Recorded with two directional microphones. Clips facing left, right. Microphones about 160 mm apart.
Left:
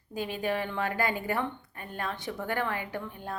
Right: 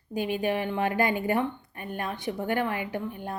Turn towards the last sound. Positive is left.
turn(degrees=-15)  # may be behind; listen again after turning